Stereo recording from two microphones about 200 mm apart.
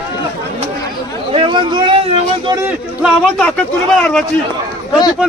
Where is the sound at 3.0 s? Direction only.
Centre (ahead or behind).